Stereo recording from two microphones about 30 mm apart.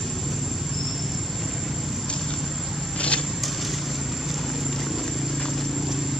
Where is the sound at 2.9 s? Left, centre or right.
Left.